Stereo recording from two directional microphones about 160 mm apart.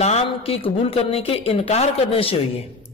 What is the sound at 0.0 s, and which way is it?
A man's voice, 40° left (ahead or behind).